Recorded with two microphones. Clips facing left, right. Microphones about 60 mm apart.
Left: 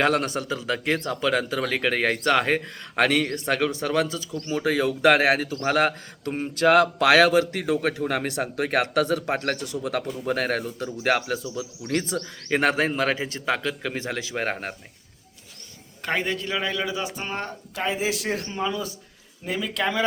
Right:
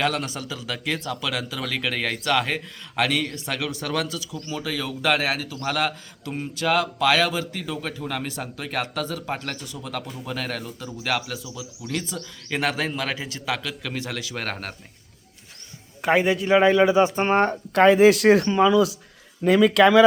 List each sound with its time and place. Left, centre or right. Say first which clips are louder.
0.0 s a man's voice: left 3 dB; left
4.4 s a man's voice: left 7 dB; left
12.5 s a man's voice: left 3 dB; left; by 14.8 s centre
16.0 s a man's voice: right 6 dB; centre
16.5 s speech: right 11 dB; right
17.2 s speech: right 11 dB; right
17.7 s speech: right 12 dB; right